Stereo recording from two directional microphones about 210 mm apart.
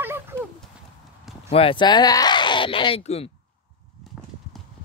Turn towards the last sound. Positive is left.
turn(degrees=30)  # may be behind; listen again after turning